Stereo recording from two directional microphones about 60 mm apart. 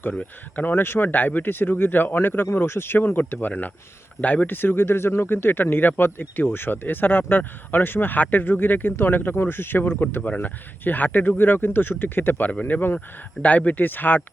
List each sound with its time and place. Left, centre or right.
0.5 s speech: left
12.5 s speech: left